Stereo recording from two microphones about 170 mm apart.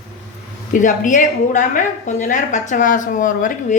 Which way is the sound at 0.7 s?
50° left (ahead or behind).